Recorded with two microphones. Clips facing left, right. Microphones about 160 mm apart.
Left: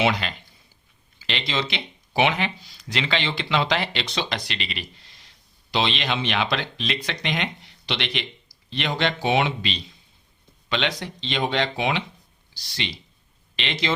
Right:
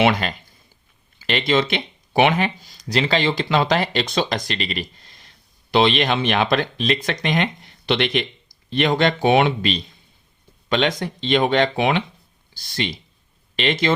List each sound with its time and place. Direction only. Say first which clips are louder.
0.0 s speech: right 5 dB; 50° right (ahead or behind)